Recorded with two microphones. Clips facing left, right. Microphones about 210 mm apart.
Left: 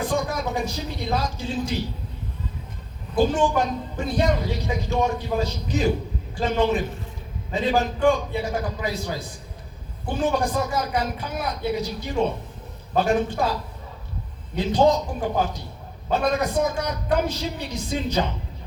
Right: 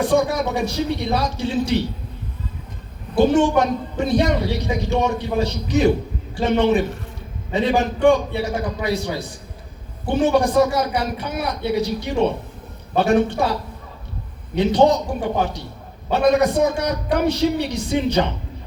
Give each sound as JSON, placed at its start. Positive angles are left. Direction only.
{"t": 0.0, "sound": "a man's voice", "side_deg": -75}
{"t": 3.2, "sound": "a man's voice", "side_deg": -75}
{"t": 16.1, "sound": "a man's voice", "side_deg": -75}